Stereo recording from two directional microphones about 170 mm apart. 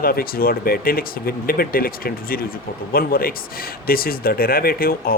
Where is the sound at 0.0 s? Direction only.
60° left (ahead or behind).